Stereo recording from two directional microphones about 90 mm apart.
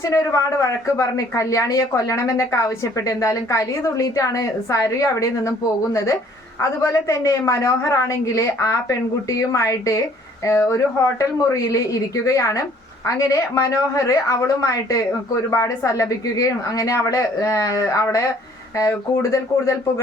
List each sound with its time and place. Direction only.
0.0 s a woman's voice: 35° left (ahead or behind)